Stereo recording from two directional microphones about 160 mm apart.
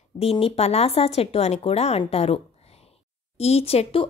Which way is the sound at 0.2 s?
35° left (ahead or behind).